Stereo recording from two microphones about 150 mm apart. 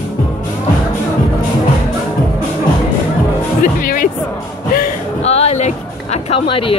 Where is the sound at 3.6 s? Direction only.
70° left (ahead or behind).